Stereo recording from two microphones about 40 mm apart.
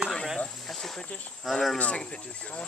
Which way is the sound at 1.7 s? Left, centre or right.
Left.